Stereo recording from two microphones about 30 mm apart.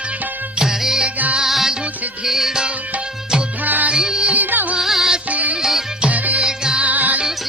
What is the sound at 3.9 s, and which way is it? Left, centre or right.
Music, right.